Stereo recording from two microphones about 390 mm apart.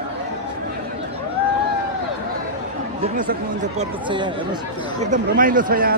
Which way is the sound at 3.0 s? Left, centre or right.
Centre.